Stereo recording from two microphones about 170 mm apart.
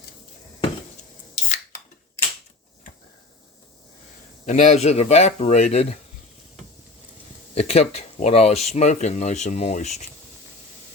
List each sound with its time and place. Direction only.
4.4 s speech: 45° left (ahead or behind)
7.5 s speech: 40° left (ahead or behind)